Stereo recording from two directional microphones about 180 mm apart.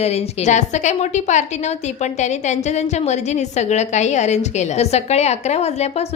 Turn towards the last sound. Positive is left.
turn(degrees=35)  # may be behind; listen again after turning